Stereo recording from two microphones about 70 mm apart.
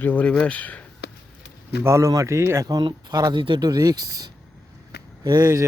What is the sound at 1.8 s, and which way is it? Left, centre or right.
Speech, right.